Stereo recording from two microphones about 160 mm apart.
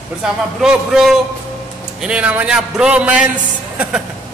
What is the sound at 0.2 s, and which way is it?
A man's voice, 5° right (ahead or behind).